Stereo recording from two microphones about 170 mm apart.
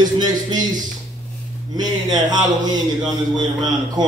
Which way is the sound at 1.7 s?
25° right (ahead or behind).